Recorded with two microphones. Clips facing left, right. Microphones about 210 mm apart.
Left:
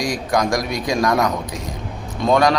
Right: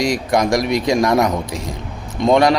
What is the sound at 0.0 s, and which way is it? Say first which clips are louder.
Speech: right 3 dB; 25° right (ahead or behind).